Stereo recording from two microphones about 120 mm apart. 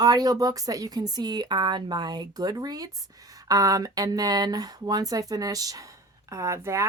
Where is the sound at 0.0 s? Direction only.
35° right (ahead or behind).